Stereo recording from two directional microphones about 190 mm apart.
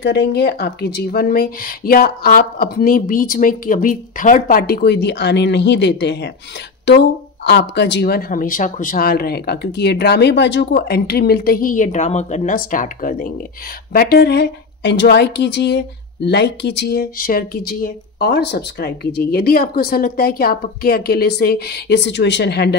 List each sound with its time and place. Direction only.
0.0 s speech: 60° left (ahead or behind)